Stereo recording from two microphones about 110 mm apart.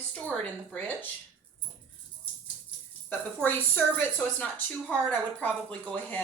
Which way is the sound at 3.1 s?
20° left (ahead or behind).